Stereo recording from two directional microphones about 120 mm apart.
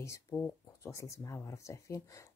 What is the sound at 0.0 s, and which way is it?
Speech, 25° left (ahead or behind).